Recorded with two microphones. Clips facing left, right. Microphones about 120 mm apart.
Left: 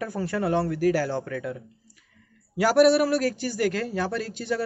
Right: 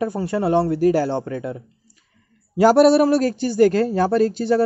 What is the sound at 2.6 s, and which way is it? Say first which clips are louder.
A man's voice: right 6 dB; 30° right (ahead or behind).